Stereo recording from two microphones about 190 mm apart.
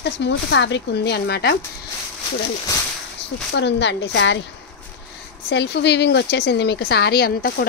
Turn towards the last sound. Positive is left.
turn(degrees=50)  # may be behind; listen again after turning